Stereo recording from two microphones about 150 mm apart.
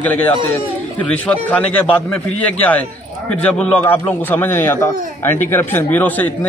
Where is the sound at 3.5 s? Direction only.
10° left (ahead or behind).